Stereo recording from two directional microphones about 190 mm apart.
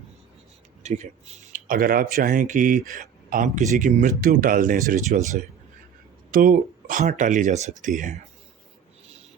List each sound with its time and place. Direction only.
0.8 s speech: 40° right (ahead or behind)